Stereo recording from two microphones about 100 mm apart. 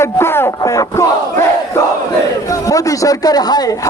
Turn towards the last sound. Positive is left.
turn(degrees=40)  # may be behind; listen again after turning